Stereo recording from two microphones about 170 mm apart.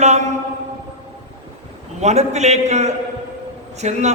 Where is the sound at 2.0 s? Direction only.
40° right (ahead or behind).